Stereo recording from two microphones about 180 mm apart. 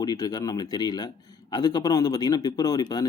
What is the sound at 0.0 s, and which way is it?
Speech, 20° left (ahead or behind).